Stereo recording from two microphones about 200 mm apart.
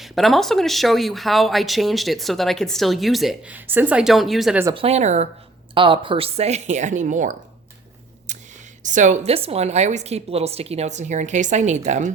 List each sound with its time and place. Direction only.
0.0 s speech: centre (ahead or behind)
4.7 s a woman's voice: 30° right (ahead or behind)
8.3 s a sound: 35° right (ahead or behind)
8.8 s a woman's voice: 40° right (ahead or behind)